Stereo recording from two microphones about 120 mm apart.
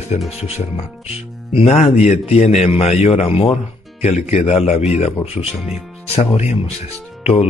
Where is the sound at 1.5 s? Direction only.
50° left (ahead or behind).